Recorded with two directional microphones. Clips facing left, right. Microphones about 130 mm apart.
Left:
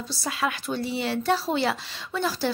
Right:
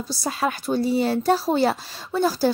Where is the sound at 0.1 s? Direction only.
40° right (ahead or behind).